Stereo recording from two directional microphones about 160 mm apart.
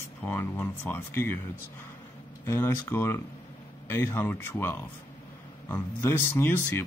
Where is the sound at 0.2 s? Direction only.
15° left (ahead or behind).